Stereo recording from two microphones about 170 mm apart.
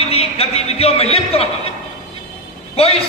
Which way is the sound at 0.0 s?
35° left (ahead or behind).